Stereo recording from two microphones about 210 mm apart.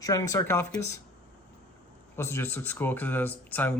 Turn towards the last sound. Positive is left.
turn(degrees=10)  # may be behind; listen again after turning